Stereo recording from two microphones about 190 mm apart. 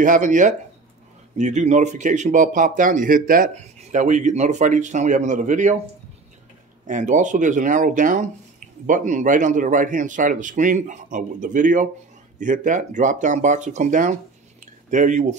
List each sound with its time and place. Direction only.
0.0 s speech: 40° right (ahead or behind)
6.9 s a man's voice: 40° right (ahead or behind)